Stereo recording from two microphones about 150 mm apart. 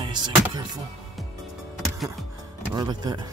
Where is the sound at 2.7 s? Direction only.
30° right (ahead or behind).